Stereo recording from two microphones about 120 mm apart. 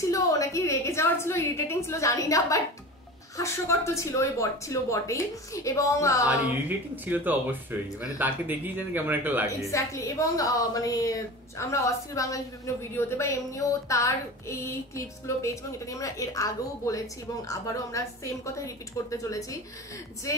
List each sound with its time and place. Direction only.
0.1 s a woman's voice: 30° left (ahead or behind)
7.1 s speech: 15° right (ahead or behind)
9.7 s a woman's voice: 25° left (ahead or behind)